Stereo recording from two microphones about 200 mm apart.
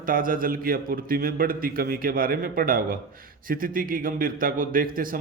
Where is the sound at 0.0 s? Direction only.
45° right (ahead or behind).